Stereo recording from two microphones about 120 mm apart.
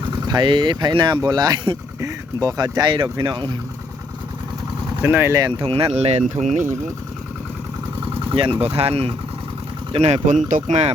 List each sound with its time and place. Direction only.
0.3 s speech: 40° right (ahead or behind)
2.0 s speech: 30° right (ahead or behind)
4.9 s speech: 20° right (ahead or behind)
5.4 s speech: 30° right (ahead or behind)
5.6 s speech: 55° right (ahead or behind); by 6.3 s 70° right (ahead or behind)
6.4 s speech: 90° right
8.3 s speech: 45° right (ahead or behind); by 10.9 s 75° right (ahead or behind)